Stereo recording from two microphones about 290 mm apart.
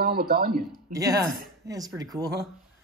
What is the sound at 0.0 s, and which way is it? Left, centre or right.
Speech, right.